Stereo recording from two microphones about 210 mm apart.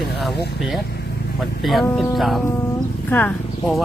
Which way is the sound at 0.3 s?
50° left (ahead or behind).